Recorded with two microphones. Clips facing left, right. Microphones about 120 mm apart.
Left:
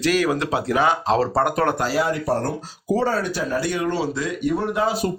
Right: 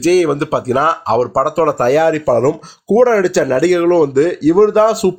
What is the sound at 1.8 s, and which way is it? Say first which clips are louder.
Speech: right 10 dB; 70° right (ahead or behind).